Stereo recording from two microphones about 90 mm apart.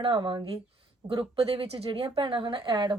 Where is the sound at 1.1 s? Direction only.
90° right; by 2.9 s 55° right (ahead or behind).